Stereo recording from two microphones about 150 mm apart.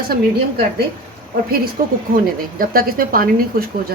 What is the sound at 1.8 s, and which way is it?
A woman's voice, 70° right (ahead or behind).